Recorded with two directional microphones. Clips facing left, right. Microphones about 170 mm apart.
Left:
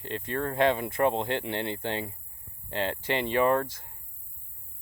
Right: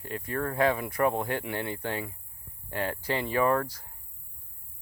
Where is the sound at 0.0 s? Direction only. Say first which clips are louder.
Left 1 dB; 25° left (ahead or behind).